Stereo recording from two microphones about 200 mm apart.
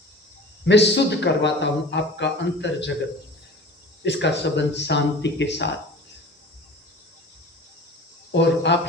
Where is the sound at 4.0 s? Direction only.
60° left (ahead or behind).